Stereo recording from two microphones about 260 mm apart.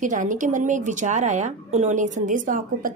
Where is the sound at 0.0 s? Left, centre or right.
Right.